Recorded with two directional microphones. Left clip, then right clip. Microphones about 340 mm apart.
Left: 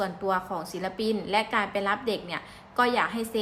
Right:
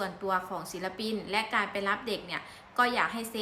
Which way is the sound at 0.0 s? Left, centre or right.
Centre.